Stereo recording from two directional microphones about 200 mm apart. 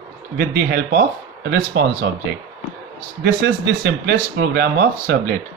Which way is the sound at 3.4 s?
55° right (ahead or behind).